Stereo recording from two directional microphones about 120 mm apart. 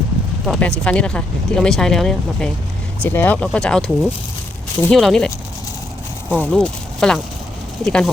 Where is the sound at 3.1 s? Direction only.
15° left (ahead or behind).